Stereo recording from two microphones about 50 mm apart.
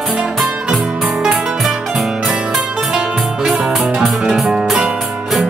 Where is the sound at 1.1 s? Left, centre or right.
Centre.